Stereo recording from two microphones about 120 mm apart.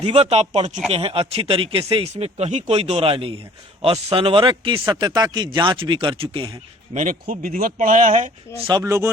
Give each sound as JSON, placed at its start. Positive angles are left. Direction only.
{"t": 0.0, "sound": "speech", "side_deg": -60}
{"t": 6.9, "sound": "a man's voice", "side_deg": -90}
{"t": 8.8, "sound": "speech", "side_deg": -25}